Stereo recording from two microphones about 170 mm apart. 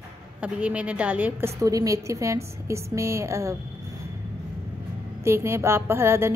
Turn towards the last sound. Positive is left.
turn(degrees=-15)  # may be behind; listen again after turning